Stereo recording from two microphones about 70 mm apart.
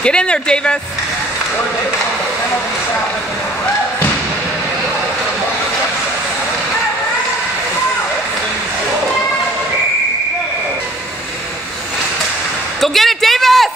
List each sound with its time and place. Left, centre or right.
0.0 s speech: centre
12.8 s a man's voice: centre